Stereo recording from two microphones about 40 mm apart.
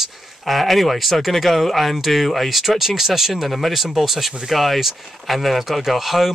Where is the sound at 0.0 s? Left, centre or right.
Centre.